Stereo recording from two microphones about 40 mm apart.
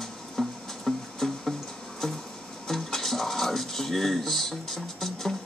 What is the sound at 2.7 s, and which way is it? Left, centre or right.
Music, centre.